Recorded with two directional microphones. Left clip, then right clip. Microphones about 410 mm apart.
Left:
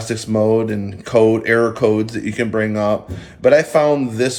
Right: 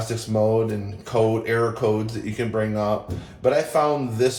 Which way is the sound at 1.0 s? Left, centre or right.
Left.